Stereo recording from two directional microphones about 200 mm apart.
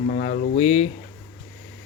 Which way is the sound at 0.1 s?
35° left (ahead or behind).